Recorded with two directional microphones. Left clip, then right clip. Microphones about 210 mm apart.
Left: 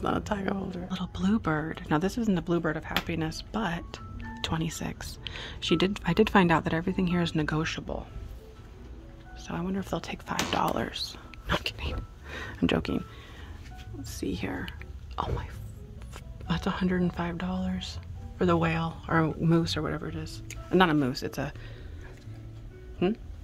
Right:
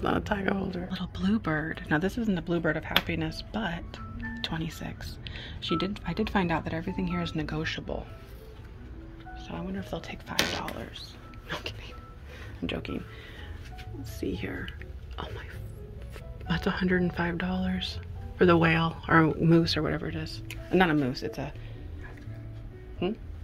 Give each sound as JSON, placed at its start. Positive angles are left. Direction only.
{"t": 0.0, "sound": "speech", "side_deg": 10}
{"t": 9.5, "sound": "speech", "side_deg": 25}
{"t": 14.2, "sound": "speech", "side_deg": 20}
{"t": 16.4, "sound": "speech", "side_deg": 15}
{"t": 23.0, "sound": "speech", "side_deg": 35}